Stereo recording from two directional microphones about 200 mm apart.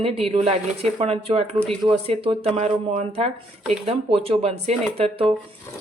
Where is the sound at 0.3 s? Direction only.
30° right (ahead or behind).